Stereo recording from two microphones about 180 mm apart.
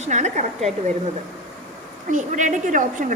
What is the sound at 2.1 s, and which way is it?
Speech, 45° right (ahead or behind).